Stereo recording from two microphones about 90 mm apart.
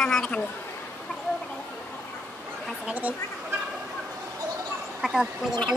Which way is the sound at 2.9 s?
15° right (ahead or behind).